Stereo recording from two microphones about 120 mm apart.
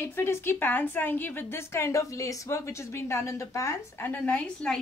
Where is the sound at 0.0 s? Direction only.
20° left (ahead or behind).